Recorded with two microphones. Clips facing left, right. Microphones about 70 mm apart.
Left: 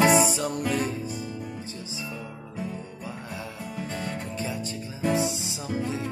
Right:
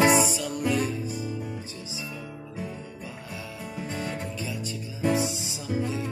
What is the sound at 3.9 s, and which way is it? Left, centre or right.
Music, centre.